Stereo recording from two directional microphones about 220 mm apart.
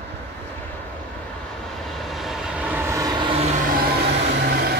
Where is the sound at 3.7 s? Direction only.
45° right (ahead or behind).